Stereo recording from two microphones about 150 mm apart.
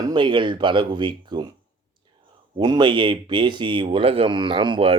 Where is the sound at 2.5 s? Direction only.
30° right (ahead or behind).